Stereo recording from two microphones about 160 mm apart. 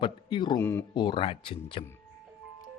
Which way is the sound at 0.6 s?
15° left (ahead or behind).